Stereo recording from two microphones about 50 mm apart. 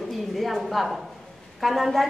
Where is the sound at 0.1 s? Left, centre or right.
Centre.